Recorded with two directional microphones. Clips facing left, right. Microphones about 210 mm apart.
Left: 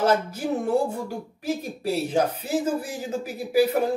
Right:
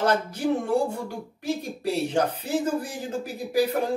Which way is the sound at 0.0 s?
5° left (ahead or behind).